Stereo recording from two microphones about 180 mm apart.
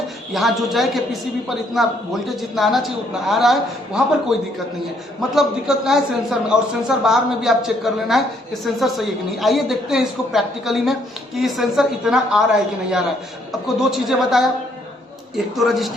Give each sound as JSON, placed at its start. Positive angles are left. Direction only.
{"t": 0.3, "sound": "a woman's voice", "side_deg": 0}
{"t": 13.5, "sound": "a woman's voice", "side_deg": 0}
{"t": 15.5, "sound": "a woman's voice", "side_deg": 0}